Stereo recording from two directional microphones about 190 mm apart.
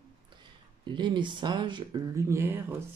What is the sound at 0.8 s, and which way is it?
Speech, 25° right (ahead or behind).